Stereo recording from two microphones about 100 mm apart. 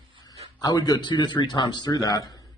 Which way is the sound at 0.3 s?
40° left (ahead or behind).